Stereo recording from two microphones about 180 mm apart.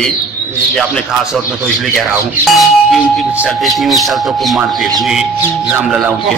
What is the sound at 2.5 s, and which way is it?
Clang, centre (ahead or behind).